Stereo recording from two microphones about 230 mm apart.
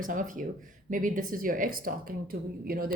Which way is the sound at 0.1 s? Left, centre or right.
Right.